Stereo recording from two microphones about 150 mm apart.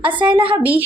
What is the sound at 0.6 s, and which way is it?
Speech, 10° right (ahead or behind).